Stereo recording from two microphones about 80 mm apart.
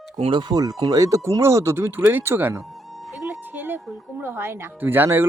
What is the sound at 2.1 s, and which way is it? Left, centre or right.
Speech, right.